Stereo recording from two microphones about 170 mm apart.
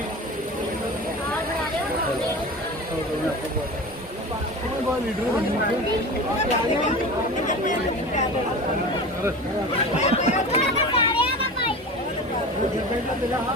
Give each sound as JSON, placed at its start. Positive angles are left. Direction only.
{"t": 10.0, "sound": "chatter", "side_deg": 40}